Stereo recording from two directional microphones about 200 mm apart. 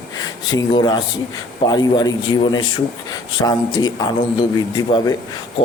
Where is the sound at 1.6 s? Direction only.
20° left (ahead or behind).